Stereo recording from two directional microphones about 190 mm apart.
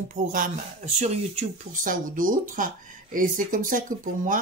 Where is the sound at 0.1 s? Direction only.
40° right (ahead or behind).